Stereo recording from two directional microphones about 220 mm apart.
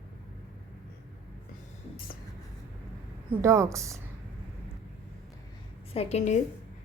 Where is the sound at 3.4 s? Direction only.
15° right (ahead or behind).